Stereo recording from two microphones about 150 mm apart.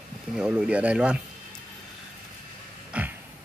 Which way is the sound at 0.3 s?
5° right (ahead or behind).